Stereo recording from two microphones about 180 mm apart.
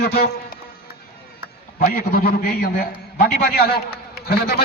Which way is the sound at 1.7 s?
50° left (ahead or behind).